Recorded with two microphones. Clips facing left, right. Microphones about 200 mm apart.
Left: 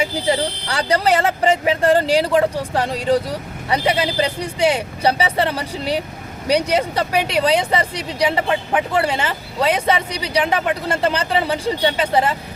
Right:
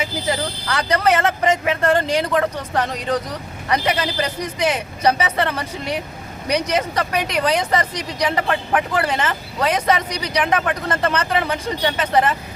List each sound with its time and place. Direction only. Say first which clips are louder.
0.0 s speech: left 4 dB; 30° left (ahead or behind)